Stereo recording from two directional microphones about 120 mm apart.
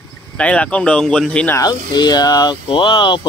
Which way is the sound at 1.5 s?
35° left (ahead or behind).